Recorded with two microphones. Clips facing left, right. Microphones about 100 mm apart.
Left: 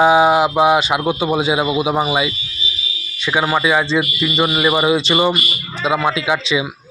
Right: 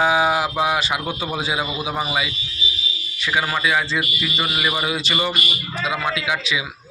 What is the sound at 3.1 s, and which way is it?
Speech, 25° left (ahead or behind).